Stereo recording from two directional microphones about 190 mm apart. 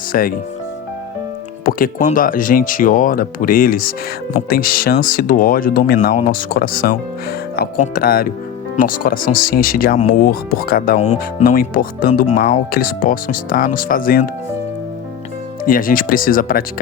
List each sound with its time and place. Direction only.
0.1 s speech: 50° left (ahead or behind)
1.6 s speech: 45° left (ahead or behind)
11.0 s speech: 35° left (ahead or behind)
11.5 s speech: 50° left (ahead or behind)
15.6 s speech: 45° left (ahead or behind)